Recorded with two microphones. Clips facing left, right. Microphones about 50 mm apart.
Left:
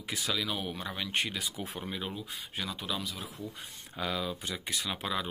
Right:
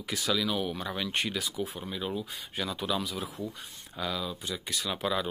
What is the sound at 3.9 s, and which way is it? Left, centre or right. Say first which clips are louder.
Speech: even; left.